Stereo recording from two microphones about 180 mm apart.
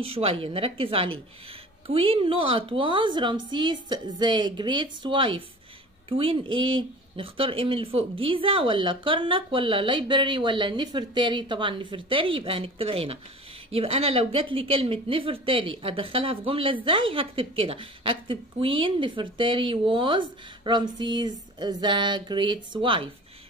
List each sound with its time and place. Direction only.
0.0 s a woman's voice: 30° right (ahead or behind)